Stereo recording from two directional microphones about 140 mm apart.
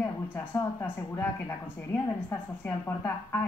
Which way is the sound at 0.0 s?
15° left (ahead or behind).